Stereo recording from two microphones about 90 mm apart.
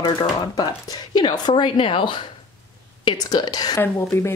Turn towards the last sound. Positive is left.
turn(degrees=30)  # may be behind; listen again after turning